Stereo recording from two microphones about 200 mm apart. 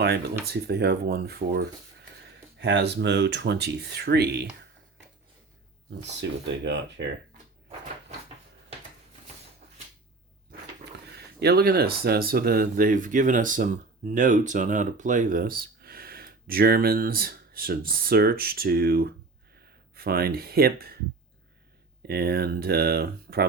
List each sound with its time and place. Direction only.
0.4 s speech: 55° right (ahead or behind)
2.6 s speech: 60° right (ahead or behind)
6.2 s speech: 65° right (ahead or behind)
11.3 s speech: 50° right (ahead or behind)
22.0 s speech: 50° right (ahead or behind)